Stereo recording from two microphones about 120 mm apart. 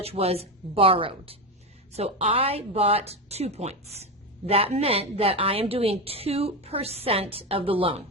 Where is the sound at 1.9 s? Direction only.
60° right (ahead or behind).